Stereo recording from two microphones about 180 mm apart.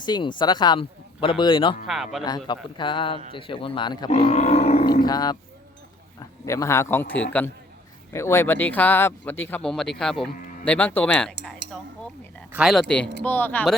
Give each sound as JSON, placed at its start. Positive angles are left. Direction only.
{"t": 0.0, "sound": "a man's voice", "side_deg": 25}
{"t": 1.9, "sound": "speech", "side_deg": 0}
{"t": 2.5, "sound": "a man's voice", "side_deg": 25}
{"t": 4.1, "sound": "roar", "side_deg": 40}
{"t": 5.0, "sound": "a man's voice", "side_deg": 20}
{"t": 12.5, "sound": "speech", "side_deg": -5}
{"t": 13.2, "sound": "speech", "side_deg": 10}